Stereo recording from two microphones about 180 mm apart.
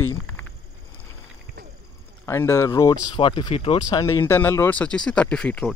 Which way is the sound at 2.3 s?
15° left (ahead or behind).